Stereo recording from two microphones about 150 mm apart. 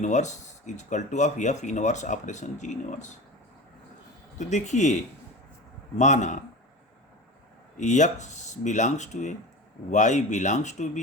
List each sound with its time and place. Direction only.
0.0 s speech: 50° left (ahead or behind)
4.4 s speech: 50° left (ahead or behind)
6.0 s speech: 50° left (ahead or behind)
7.8 s speech: 50° left (ahead or behind)